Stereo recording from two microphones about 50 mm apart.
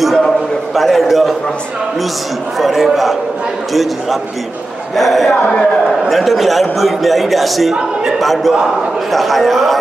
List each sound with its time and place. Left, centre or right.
0.7 s a man's voice: centre
2.6 s a man's voice: centre
4.9 s a man's voice: centre
5.3 s speech: centre
5.9 s a man's voice: centre